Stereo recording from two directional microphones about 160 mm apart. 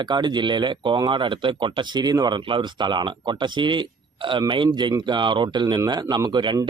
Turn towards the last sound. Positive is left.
turn(degrees=-30)  # may be behind; listen again after turning